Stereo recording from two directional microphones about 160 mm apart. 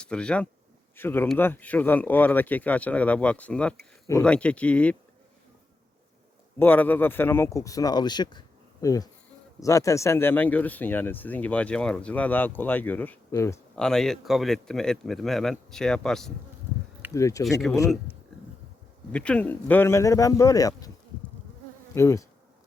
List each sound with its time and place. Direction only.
0.0 s speech: 5° left (ahead or behind)
6.6 s speech: 10° left (ahead or behind)
13.7 s speech: 5° left (ahead or behind)
17.2 s speech: 20° left (ahead or behind)
17.7 s speech: centre (ahead or behind)
19.1 s speech: 5° left (ahead or behind)
21.9 s speech: 20° left (ahead or behind)